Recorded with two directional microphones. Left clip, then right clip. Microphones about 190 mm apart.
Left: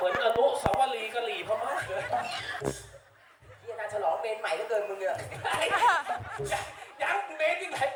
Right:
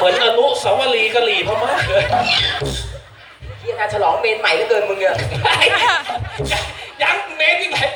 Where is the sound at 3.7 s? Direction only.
45° left (ahead or behind).